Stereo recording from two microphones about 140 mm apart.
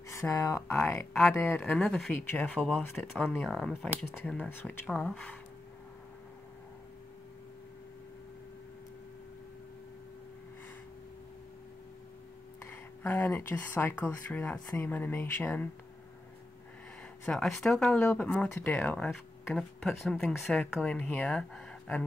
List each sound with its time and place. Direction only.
0.1 s speech: 20° left (ahead or behind)
12.6 s speech: 15° left (ahead or behind)
17.3 s speech: centre (ahead or behind)